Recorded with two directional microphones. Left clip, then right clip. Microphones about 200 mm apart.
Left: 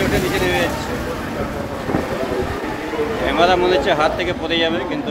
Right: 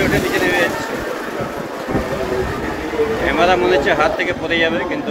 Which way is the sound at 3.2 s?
20° left (ahead or behind).